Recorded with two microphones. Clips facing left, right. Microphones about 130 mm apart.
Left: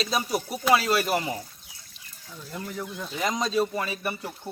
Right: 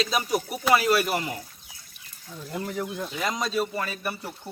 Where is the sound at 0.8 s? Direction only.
30° left (ahead or behind).